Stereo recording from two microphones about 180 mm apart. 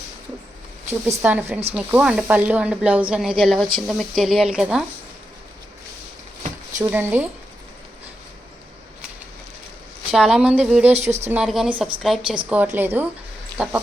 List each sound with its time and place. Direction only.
0.9 s speech: 10° right (ahead or behind)
6.8 s speech: 10° right (ahead or behind)
10.1 s speech: 5° right (ahead or behind)
10.9 s speech: 40° right (ahead or behind)
11.3 s speech: 5° right (ahead or behind)